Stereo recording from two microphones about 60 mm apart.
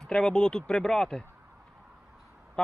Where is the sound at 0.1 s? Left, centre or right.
Centre.